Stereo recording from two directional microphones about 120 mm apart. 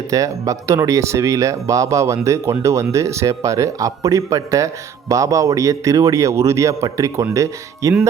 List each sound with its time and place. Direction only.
0.1 s speech: 30° right (ahead or behind)